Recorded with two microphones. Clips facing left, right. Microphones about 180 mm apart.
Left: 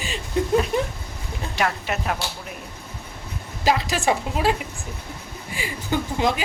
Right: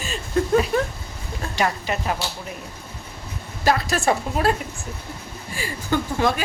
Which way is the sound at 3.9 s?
15° left (ahead or behind).